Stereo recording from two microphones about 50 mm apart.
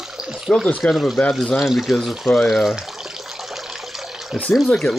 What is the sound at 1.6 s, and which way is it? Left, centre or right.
Water, centre.